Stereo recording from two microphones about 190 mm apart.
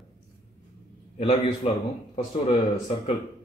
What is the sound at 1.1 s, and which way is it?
Speech, 35° left (ahead or behind).